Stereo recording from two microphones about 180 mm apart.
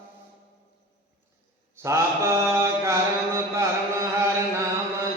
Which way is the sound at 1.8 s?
15° right (ahead or behind).